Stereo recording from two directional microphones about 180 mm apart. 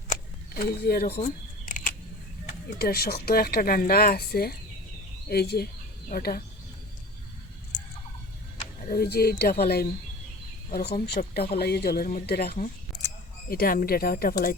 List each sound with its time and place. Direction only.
0.5 s speech: 55° left (ahead or behind)
1.1 s camera: 40° left (ahead or behind)
2.6 s speech: 55° left (ahead or behind)
8.9 s speech: 60° left (ahead or behind)